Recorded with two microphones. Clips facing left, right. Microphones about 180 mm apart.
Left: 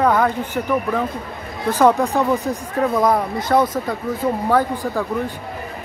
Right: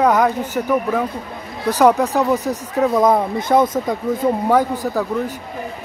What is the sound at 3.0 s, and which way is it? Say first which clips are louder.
Speech: right 2 dB; 20° right (ahead or behind).